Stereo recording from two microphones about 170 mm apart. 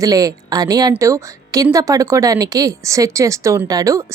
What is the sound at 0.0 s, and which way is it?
Speech, 20° right (ahead or behind).